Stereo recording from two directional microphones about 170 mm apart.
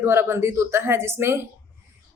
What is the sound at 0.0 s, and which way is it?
Speech, 15° right (ahead or behind).